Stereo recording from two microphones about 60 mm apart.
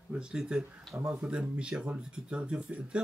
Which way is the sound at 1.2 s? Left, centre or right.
Centre.